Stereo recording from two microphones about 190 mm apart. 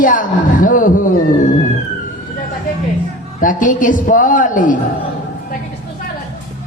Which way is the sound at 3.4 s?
45° left (ahead or behind).